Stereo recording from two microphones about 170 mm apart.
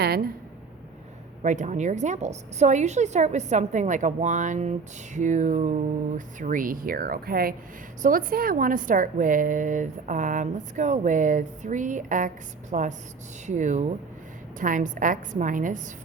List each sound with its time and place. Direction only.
1.4 s a woman's voice: 45° right (ahead or behind)